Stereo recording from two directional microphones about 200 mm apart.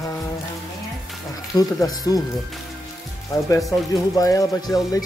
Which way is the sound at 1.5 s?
20° left (ahead or behind).